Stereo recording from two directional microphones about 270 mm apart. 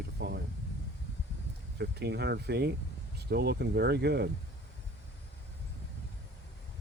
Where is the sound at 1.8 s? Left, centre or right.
Right.